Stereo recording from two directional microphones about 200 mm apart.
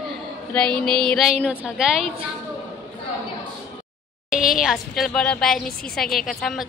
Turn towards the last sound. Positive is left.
turn(degrees=0)  # may be behind; listen again after turning